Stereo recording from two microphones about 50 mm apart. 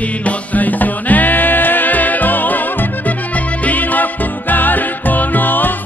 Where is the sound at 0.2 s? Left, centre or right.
Left.